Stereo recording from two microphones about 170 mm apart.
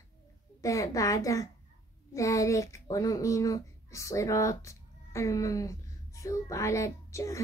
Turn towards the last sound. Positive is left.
turn(degrees=20)  # may be behind; listen again after turning